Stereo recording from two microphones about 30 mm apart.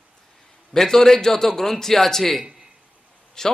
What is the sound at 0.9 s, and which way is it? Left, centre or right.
A man's voice, centre.